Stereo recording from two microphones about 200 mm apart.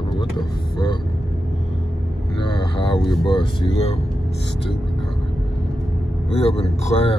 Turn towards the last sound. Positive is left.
turn(degrees=30)  # may be behind; listen again after turning